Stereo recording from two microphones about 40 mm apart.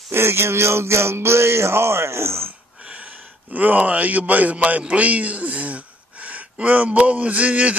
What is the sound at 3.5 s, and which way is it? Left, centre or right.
A man's voice, right.